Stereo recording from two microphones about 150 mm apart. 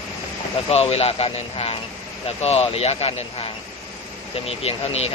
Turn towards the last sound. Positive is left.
turn(degrees=40)  # may be behind; listen again after turning